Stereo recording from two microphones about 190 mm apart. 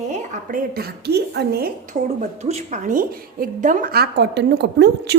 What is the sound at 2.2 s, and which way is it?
A woman's voice, 35° right (ahead or behind).